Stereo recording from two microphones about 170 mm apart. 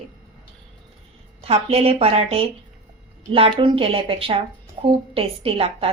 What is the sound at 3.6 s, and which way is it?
A woman's voice, 30° right (ahead or behind).